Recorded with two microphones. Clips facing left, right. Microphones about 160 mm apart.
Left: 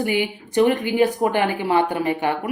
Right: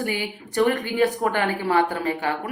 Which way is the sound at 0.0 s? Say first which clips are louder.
Left 5 dB; 20° left (ahead or behind).